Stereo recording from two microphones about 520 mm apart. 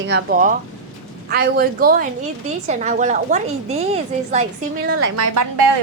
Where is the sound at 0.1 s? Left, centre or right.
Centre; by 5.6 s right.